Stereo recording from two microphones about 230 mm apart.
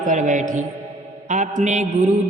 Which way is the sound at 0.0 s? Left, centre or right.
Right.